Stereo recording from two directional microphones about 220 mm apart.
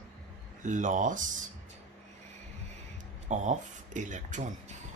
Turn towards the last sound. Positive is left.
turn(degrees=-35)  # may be behind; listen again after turning